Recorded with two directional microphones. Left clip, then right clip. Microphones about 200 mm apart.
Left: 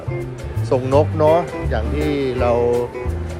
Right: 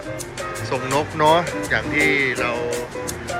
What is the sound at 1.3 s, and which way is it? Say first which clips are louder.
Speech: left 1 dB; 5° left (ahead or behind).